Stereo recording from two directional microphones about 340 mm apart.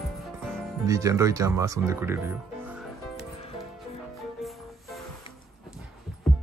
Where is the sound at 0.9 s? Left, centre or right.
Centre.